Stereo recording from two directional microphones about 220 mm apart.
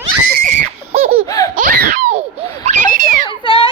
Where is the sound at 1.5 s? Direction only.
35° right (ahead or behind).